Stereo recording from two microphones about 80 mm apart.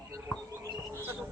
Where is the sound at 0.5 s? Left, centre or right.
Right.